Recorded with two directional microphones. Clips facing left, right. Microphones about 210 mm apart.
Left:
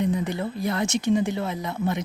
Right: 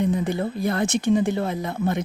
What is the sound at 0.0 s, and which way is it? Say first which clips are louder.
Speech: right 2 dB; 50° right (ahead or behind).